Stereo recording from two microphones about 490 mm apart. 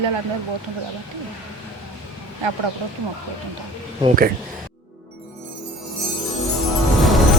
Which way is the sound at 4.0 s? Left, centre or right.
Centre.